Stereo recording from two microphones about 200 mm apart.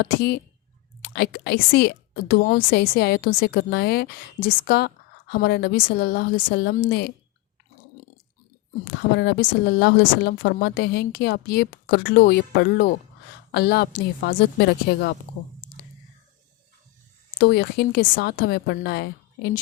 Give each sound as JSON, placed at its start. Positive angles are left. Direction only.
{"t": 0.0, "sound": "speech", "side_deg": 55}
{"t": 8.8, "sound": "a woman's voice", "side_deg": 55}
{"t": 17.3, "sound": "speech", "side_deg": 55}